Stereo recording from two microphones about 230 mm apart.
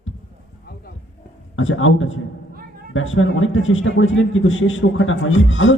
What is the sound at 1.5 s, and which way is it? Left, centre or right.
A man's voice, left.